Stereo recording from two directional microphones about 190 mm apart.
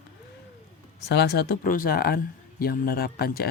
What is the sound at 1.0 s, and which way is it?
Speech, 60° left (ahead or behind).